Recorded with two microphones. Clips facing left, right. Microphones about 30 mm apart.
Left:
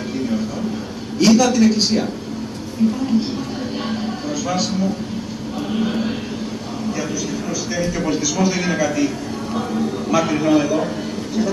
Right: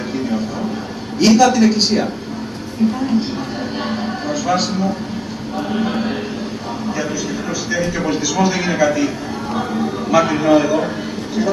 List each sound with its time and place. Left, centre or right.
1.2 s a man's voice: centre
3.9 s a sound: centre
5.7 s a man's voice: centre
7.7 s a man's voice: centre